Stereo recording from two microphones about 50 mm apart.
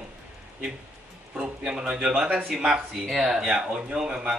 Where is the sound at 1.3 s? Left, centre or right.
Centre.